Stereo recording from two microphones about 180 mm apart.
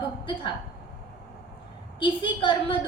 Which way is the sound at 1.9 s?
30° left (ahead or behind).